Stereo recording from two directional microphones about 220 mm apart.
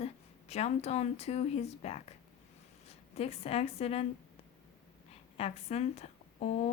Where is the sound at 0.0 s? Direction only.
30° left (ahead or behind).